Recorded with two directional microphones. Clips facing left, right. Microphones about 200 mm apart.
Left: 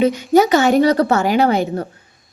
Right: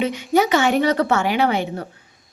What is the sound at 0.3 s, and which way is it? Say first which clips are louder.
A woman's voice: left 4 dB; 40° left (ahead or behind).